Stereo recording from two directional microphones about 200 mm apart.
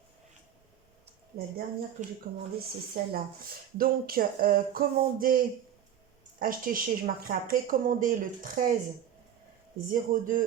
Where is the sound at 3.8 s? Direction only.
45° right (ahead or behind).